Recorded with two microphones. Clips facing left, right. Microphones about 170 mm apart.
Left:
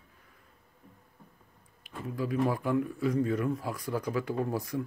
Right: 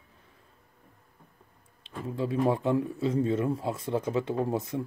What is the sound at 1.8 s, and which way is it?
A man's voice, 25° right (ahead or behind).